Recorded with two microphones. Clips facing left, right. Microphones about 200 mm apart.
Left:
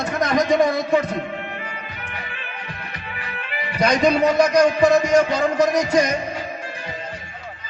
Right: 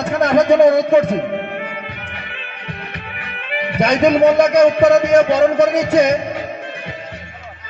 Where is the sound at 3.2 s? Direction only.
60° right (ahead or behind).